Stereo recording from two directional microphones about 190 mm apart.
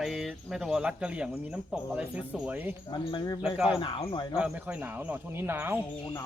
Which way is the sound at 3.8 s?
25° left (ahead or behind).